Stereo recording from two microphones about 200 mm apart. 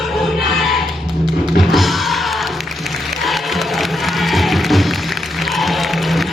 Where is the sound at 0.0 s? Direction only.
Centre (ahead or behind).